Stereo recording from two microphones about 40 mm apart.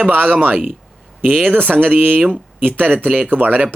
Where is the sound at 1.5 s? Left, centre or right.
Right.